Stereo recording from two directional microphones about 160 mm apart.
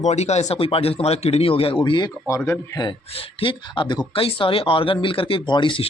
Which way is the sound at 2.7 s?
30° left (ahead or behind).